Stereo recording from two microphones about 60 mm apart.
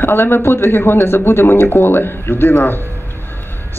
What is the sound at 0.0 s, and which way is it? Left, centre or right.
A man's voice, left.